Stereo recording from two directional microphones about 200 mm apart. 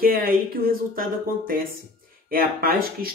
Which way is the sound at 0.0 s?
50° right (ahead or behind).